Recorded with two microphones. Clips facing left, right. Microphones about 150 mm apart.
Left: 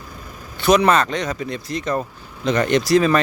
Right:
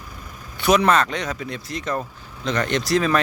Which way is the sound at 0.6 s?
5° right (ahead or behind).